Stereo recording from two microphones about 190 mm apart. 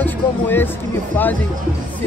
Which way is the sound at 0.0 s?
10° left (ahead or behind).